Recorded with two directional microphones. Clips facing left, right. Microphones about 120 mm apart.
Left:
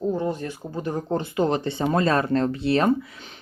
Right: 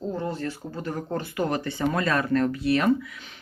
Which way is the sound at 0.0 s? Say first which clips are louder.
Left 4 dB; 15° left (ahead or behind).